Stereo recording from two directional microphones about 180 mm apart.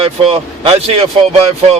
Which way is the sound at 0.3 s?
30° right (ahead or behind).